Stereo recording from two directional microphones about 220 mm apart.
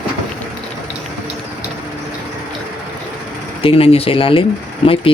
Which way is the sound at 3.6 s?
25° left (ahead or behind).